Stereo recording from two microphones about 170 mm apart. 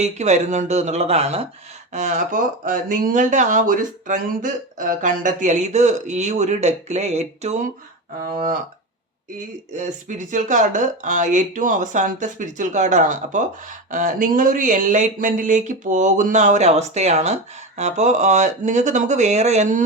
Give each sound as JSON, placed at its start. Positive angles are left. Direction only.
{"t": 0.0, "sound": "speech", "side_deg": -40}
{"t": 9.7, "sound": "speech", "side_deg": -45}